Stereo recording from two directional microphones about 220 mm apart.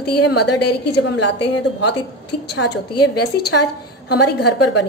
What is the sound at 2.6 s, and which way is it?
A woman's voice, 50° left (ahead or behind).